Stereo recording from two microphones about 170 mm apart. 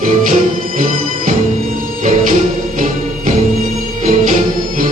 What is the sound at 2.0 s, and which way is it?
Music, 50° right (ahead or behind).